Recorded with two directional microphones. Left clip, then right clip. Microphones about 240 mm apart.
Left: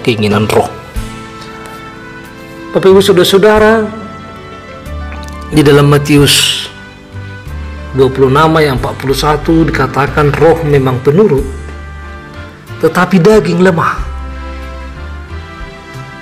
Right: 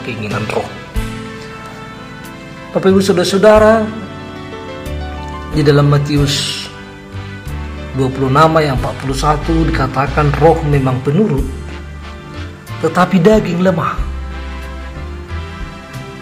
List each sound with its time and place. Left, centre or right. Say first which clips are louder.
0.0 s speech: left 10 dB; left
2.7 s speech: left 6 dB; left
5.6 s speech: left 6 dB; left
8.0 s speech: left 4 dB; left
12.9 s speech: left 2 dB; left